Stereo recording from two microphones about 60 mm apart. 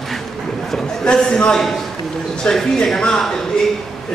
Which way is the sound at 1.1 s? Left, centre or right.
Centre.